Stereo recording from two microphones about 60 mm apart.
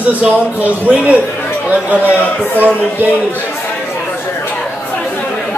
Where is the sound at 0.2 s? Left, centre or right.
Right.